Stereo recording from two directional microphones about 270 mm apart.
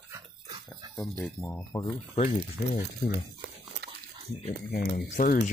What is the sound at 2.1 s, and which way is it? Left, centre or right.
Speech, left.